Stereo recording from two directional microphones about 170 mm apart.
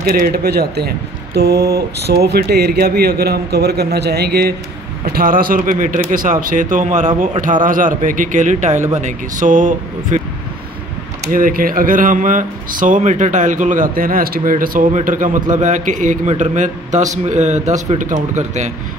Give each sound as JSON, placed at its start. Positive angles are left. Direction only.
{"t": 0.1, "sound": "speech", "side_deg": -65}
{"t": 5.0, "sound": "speech", "side_deg": -60}
{"t": 11.3, "sound": "speech", "side_deg": -55}